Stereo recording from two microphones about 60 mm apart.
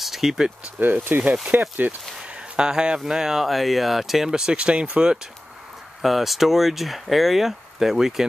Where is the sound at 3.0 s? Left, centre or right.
Centre.